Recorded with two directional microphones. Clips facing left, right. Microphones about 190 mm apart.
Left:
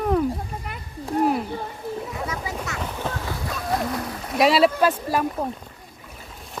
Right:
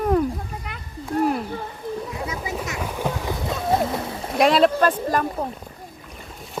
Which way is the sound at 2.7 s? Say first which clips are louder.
Right 4 dB; 10° right (ahead or behind).